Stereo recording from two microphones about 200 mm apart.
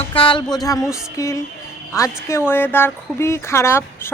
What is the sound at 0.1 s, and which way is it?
Speech, 25° left (ahead or behind).